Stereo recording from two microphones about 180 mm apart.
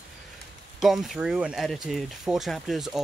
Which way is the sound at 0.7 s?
Centre (ahead or behind).